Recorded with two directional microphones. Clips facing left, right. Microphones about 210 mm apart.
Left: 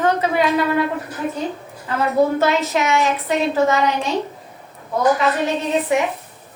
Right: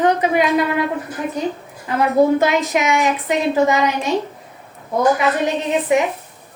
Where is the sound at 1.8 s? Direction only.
15° right (ahead or behind).